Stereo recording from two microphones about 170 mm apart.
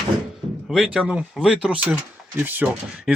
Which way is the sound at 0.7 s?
Centre (ahead or behind).